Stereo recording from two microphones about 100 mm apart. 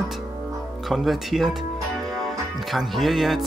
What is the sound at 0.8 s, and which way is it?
Speech, centre (ahead or behind).